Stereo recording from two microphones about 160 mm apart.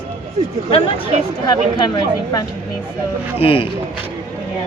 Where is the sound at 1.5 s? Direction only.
25° left (ahead or behind).